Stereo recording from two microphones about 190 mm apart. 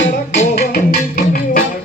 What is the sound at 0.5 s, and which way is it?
Music, 55° left (ahead or behind).